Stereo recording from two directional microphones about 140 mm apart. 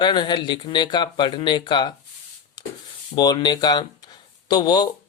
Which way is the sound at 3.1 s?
30° left (ahead or behind).